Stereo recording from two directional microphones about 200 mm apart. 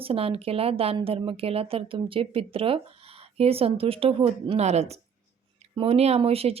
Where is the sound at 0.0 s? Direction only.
30° right (ahead or behind).